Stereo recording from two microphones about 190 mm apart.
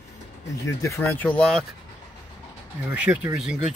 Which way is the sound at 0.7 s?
15° left (ahead or behind).